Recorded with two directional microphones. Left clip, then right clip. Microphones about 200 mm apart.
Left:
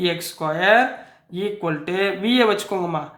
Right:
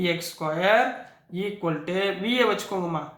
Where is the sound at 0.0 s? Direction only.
45° left (ahead or behind).